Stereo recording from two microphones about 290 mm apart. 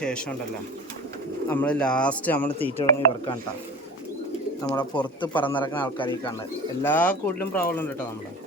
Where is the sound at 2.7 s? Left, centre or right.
Centre.